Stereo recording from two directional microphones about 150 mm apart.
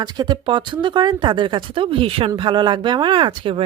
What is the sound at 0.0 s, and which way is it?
A woman's voice, 30° right (ahead or behind).